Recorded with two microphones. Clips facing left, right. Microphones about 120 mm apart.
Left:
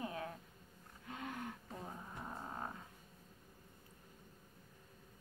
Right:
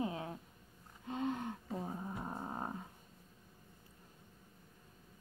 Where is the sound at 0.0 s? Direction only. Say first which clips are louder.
Right 4 dB; 25° right (ahead or behind).